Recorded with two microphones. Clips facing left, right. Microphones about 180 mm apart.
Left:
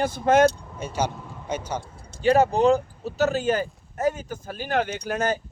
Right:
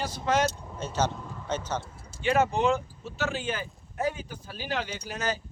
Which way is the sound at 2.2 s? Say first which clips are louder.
Left 6 dB; 35° left (ahead or behind).